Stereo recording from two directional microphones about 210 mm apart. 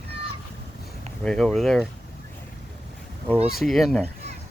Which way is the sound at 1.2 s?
5° left (ahead or behind).